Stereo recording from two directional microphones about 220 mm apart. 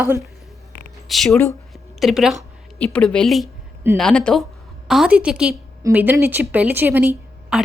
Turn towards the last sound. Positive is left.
turn(degrees=-5)  # may be behind; listen again after turning